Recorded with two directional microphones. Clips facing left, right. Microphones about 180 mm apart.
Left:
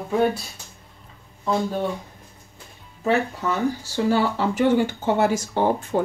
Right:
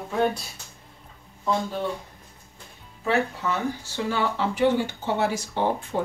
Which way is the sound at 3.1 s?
35° left (ahead or behind).